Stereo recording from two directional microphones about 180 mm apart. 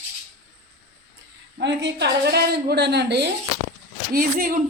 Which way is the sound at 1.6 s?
80° right.